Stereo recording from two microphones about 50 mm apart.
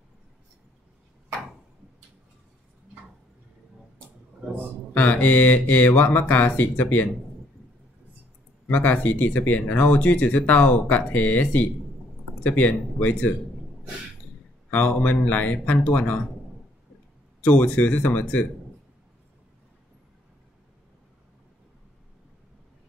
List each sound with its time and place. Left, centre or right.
4.9 s speech: left
8.6 s speech: left
14.7 s speech: left
17.4 s speech: left